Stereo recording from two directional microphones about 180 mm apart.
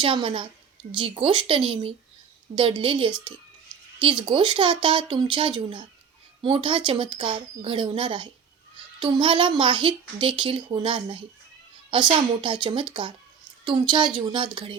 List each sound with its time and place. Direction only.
0.0 s speech: 30° right (ahead or behind)